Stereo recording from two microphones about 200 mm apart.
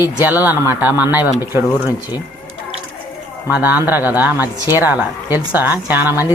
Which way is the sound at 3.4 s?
10° right (ahead or behind).